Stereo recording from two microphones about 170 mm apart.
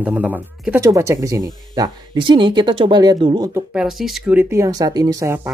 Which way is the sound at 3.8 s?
Centre (ahead or behind).